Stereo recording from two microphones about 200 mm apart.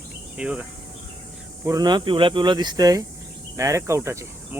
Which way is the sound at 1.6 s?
20° right (ahead or behind).